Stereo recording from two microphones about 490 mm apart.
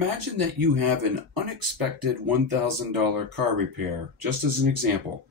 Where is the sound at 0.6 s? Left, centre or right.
Right.